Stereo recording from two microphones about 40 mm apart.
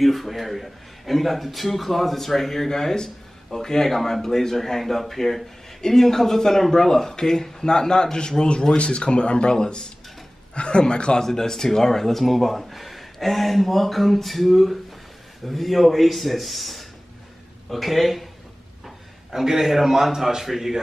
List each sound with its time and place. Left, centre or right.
0.0 s a man's voice: centre; by 11.2 s left
11.2 s a man's voice: centre
19.3 s a man's voice: centre